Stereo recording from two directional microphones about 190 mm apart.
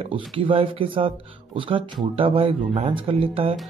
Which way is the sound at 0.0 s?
30° right (ahead or behind).